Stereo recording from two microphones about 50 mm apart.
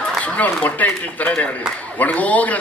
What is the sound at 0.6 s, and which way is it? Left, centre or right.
A man's voice, left.